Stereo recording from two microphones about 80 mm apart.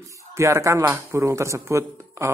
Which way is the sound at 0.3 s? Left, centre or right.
Right.